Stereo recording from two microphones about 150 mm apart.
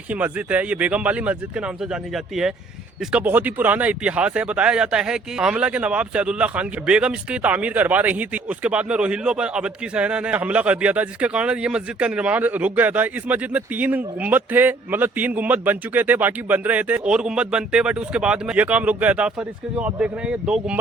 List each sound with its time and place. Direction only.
0.1 s speech: 10° right (ahead or behind)